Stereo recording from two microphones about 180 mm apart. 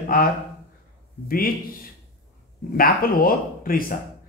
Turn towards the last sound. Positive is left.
turn(degrees=50)  # may be behind; listen again after turning